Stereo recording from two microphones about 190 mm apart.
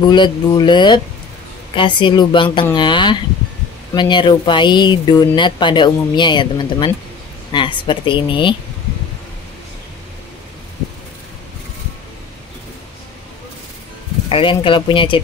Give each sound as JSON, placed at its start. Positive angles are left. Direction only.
{"t": 0.0, "sound": "speech", "side_deg": 25}
{"t": 14.3, "sound": "speech", "side_deg": 25}